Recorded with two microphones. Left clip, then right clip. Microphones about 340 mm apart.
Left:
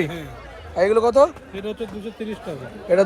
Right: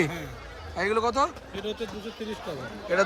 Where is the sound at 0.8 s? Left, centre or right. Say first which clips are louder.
Left 9 dB; centre.